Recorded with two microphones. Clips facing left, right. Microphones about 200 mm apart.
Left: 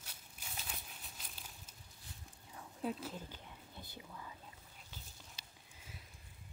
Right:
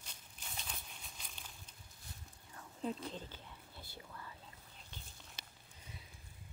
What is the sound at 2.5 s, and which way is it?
Whispering, 5° left (ahead or behind).